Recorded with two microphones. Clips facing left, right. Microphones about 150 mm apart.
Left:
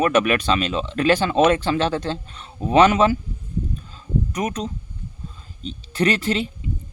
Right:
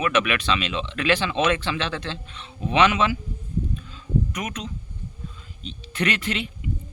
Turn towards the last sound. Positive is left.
turn(degrees=35)  # may be behind; listen again after turning